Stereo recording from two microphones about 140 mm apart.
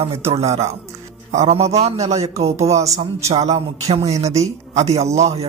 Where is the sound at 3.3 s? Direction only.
50° right (ahead or behind).